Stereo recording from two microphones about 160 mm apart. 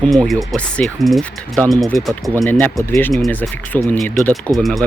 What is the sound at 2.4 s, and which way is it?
Speech, 15° left (ahead or behind).